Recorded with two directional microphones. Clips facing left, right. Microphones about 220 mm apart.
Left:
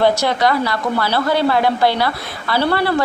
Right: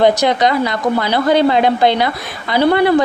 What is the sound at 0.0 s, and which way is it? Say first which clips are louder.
A woman's voice: right 3 dB; 20° right (ahead or behind).